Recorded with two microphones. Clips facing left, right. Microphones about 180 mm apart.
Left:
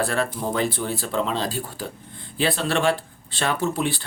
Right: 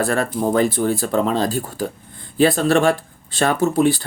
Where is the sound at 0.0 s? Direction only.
45° right (ahead or behind).